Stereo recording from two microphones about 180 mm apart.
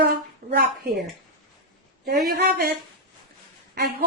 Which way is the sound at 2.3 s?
60° right (ahead or behind).